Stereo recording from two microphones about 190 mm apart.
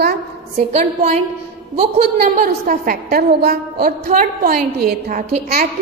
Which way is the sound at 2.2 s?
45° right (ahead or behind).